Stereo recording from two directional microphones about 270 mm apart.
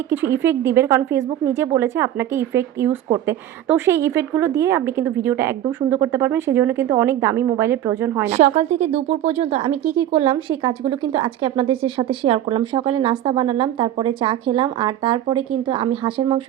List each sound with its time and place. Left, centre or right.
0.1 s a woman's voice: centre
8.3 s speech: right